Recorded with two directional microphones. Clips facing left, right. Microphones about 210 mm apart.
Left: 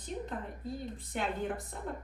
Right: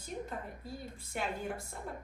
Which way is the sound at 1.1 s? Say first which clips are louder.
Left 2 dB; centre (ahead or behind).